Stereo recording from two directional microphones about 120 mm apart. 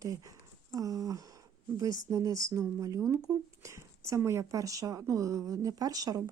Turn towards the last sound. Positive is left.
turn(degrees=-30)  # may be behind; listen again after turning